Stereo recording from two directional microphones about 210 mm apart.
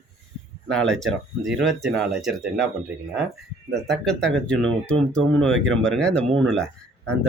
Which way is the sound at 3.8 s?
5° left (ahead or behind).